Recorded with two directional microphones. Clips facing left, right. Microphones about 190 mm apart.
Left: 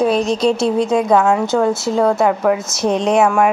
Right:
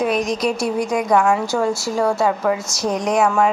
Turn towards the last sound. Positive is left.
turn(degrees=25)  # may be behind; listen again after turning